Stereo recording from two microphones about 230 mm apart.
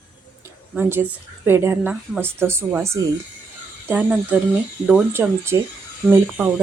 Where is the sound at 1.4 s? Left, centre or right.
Centre.